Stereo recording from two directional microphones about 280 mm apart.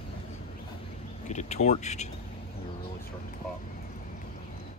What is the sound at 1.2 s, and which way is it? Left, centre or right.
Speech, left.